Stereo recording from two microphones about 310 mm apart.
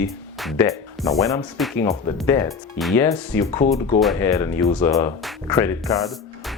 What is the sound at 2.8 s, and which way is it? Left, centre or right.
Speech, centre.